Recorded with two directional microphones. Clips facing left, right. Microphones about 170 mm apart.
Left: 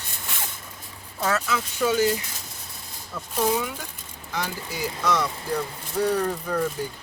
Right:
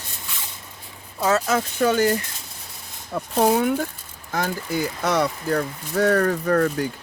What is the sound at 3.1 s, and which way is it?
Speech, 55° right (ahead or behind).